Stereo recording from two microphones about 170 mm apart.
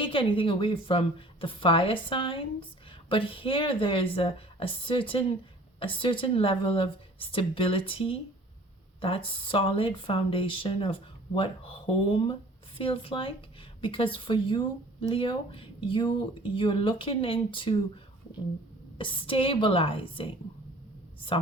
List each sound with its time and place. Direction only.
0.0 s a woman's voice: 30° left (ahead or behind)
18.9 s speech: 30° left (ahead or behind)